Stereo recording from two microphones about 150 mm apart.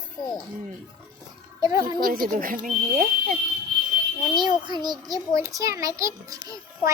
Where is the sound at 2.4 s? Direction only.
65° right (ahead or behind).